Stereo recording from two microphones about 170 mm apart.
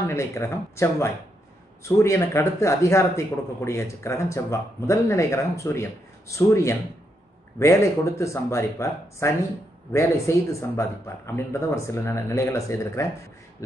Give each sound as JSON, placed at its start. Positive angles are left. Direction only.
{"t": 0.0, "sound": "speech", "side_deg": 15}